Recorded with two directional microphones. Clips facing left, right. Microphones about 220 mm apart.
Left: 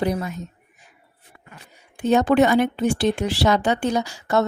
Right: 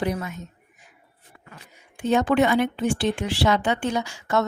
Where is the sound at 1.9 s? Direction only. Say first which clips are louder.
Left 3 dB; 40° left (ahead or behind).